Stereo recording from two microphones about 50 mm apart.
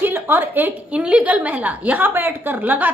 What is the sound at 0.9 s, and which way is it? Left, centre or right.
A woman's voice, right.